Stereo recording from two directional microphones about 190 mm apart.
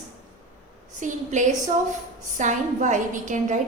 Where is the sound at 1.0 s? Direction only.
40° right (ahead or behind).